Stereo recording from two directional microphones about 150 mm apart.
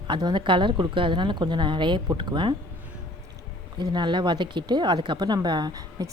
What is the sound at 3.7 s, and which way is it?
Speech, 30° right (ahead or behind).